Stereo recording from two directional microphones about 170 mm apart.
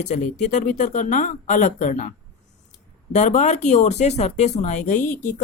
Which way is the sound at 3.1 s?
45° left (ahead or behind).